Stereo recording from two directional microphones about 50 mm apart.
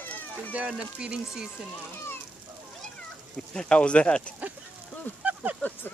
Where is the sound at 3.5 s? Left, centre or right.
Centre.